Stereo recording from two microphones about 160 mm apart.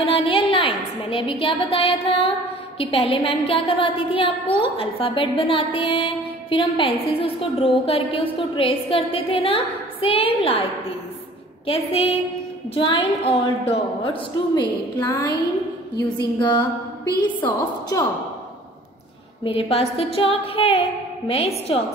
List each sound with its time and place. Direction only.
0.1 s a woman's voice: 35° left (ahead or behind)
11.6 s a woman's voice: 35° left (ahead or behind)
14.5 s a sound: 25° left (ahead or behind)
16.3 s music: 30° left (ahead or behind)
17.2 s a sound: 30° left (ahead or behind)
19.4 s a woman's voice: 35° left (ahead or behind)